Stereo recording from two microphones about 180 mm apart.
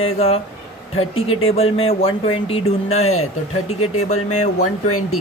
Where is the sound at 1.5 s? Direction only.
30° left (ahead or behind).